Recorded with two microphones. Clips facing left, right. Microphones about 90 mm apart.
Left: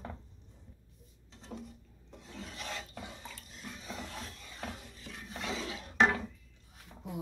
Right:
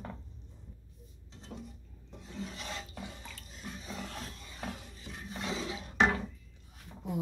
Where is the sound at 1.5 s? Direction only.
20° left (ahead or behind).